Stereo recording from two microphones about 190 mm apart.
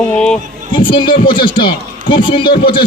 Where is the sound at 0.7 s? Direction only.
25° left (ahead or behind).